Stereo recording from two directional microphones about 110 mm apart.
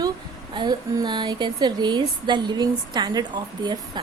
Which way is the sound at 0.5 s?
40° right (ahead or behind).